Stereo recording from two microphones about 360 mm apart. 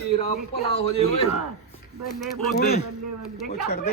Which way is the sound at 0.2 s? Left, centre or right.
Centre.